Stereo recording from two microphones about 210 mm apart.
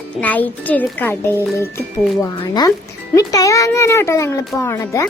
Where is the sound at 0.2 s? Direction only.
10° left (ahead or behind).